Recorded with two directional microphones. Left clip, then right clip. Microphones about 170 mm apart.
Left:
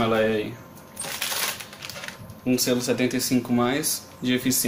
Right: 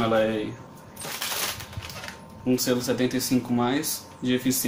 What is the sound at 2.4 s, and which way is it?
Speech, 20° left (ahead or behind).